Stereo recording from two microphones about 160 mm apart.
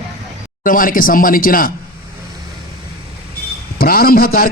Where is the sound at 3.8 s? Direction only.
65° left (ahead or behind).